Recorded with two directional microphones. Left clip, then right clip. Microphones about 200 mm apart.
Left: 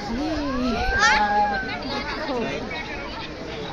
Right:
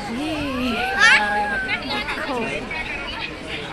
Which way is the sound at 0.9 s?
50° left (ahead or behind).